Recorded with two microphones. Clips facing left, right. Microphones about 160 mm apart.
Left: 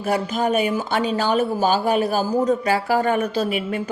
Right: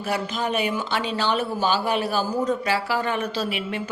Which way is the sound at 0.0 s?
45° left (ahead or behind).